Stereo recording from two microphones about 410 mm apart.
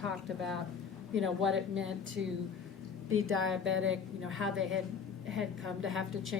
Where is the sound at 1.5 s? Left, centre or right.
Right.